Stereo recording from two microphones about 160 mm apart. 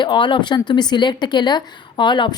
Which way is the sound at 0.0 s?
30° left (ahead or behind).